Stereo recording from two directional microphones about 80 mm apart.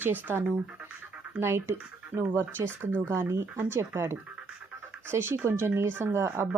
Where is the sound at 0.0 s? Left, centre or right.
Right.